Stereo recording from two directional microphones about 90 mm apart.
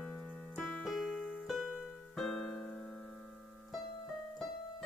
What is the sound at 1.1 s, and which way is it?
Music, 15° left (ahead or behind).